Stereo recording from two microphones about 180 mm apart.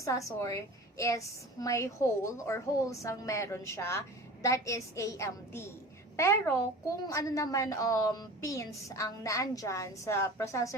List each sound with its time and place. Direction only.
0.0 s a woman's voice: 15° left (ahead or behind)